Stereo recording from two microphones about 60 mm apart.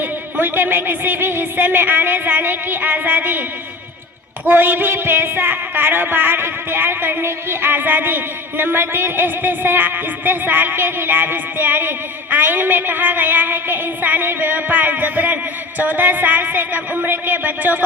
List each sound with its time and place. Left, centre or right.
0.0 s speech: right
4.4 s speech: right